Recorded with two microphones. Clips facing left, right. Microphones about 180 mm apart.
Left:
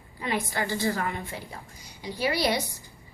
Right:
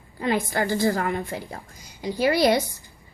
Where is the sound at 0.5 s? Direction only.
45° right (ahead or behind).